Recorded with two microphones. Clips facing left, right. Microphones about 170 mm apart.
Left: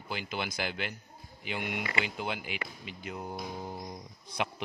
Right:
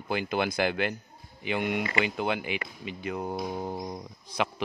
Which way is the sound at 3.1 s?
70° right (ahead or behind).